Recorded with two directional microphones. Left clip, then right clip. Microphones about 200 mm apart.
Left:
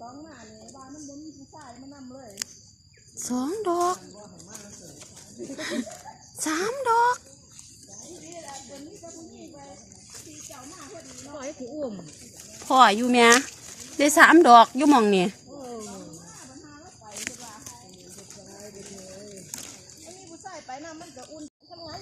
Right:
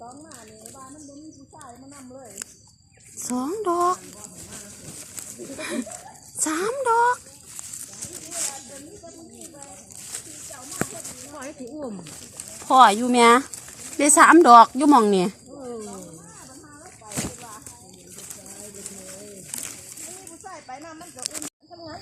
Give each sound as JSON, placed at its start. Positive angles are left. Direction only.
{"t": 3.2, "sound": "a woman's voice", "side_deg": 0}
{"t": 5.5, "sound": "a woman's voice", "side_deg": 0}
{"t": 6.4, "sound": "a sound", "side_deg": 0}
{"t": 11.3, "sound": "a sound", "side_deg": -55}
{"t": 12.6, "sound": "a woman's voice", "side_deg": 5}
{"t": 20.4, "sound": "snake", "side_deg": 50}